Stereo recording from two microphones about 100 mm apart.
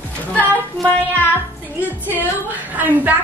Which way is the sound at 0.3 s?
15° left (ahead or behind).